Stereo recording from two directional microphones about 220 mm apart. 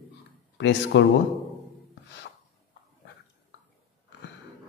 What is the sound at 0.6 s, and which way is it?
Speech, 55° left (ahead or behind).